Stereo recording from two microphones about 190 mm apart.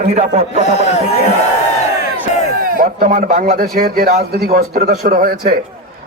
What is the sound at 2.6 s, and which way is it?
A man's voice, 50° right (ahead or behind).